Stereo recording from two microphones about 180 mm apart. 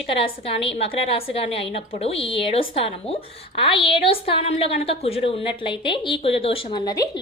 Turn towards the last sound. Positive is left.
turn(degrees=20)  # may be behind; listen again after turning